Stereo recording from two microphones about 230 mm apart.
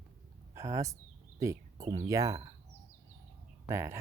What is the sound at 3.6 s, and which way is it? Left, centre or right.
Speech, centre.